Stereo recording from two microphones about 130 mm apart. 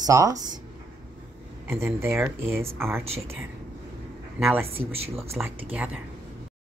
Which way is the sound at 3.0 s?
50° right (ahead or behind).